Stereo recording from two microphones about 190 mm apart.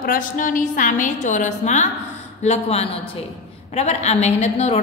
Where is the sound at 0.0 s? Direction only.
45° left (ahead or behind).